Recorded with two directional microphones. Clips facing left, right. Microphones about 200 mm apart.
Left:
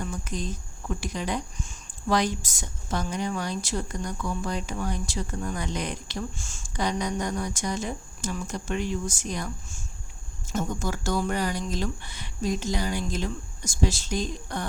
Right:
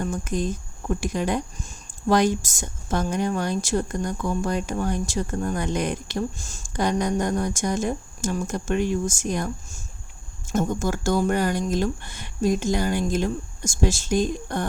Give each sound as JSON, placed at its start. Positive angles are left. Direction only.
{"t": 0.0, "sound": "speech", "side_deg": -50}